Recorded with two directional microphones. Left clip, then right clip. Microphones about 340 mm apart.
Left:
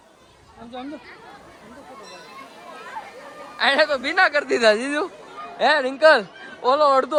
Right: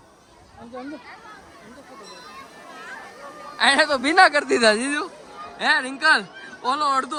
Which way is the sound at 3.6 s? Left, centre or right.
Centre.